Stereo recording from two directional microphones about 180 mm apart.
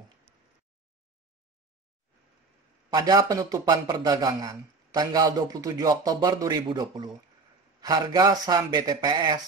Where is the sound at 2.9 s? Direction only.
20° right (ahead or behind).